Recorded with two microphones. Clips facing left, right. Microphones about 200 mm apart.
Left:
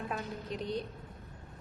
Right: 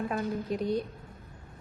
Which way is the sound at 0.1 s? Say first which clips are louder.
Right 7 dB; 50° right (ahead or behind).